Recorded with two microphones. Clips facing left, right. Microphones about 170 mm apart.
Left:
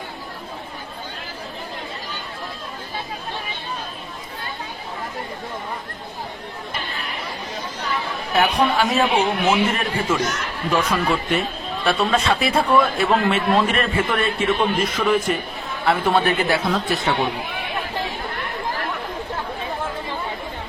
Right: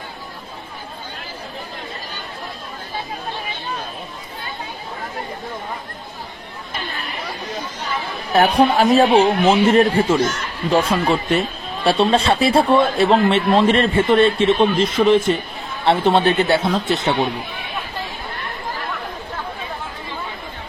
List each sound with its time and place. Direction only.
8.4 s speech: 40° right (ahead or behind)